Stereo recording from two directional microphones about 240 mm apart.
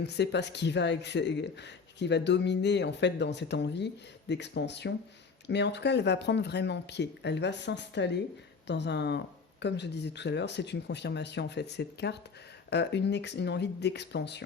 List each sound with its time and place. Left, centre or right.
0.0 s speech: left